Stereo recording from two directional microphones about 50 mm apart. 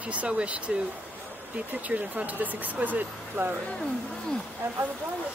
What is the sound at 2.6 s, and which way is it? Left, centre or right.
Speech, right.